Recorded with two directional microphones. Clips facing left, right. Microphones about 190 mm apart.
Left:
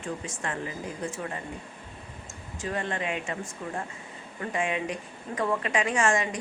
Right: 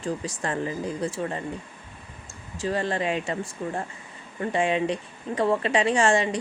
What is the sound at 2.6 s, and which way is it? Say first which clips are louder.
A woman's voice: right 5 dB; 35° right (ahead or behind).